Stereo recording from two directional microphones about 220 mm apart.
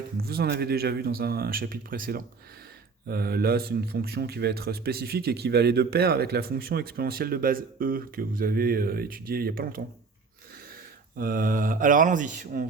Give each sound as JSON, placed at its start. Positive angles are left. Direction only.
{"t": 0.2, "sound": "speech", "side_deg": -45}
{"t": 11.2, "sound": "speech", "side_deg": -40}